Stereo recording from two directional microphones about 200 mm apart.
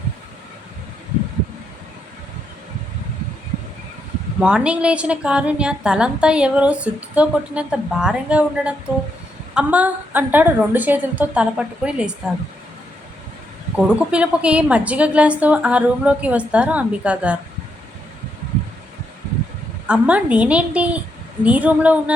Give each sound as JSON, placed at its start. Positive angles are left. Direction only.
{"t": 4.4, "sound": "a woman's voice", "side_deg": -5}
{"t": 13.7, "sound": "a woman's voice", "side_deg": -5}
{"t": 19.9, "sound": "a woman's voice", "side_deg": -5}